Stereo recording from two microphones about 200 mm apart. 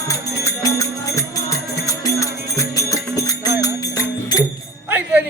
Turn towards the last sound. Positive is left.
turn(degrees=-5)  # may be behind; listen again after turning